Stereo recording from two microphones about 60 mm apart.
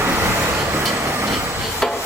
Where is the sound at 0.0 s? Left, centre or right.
Right.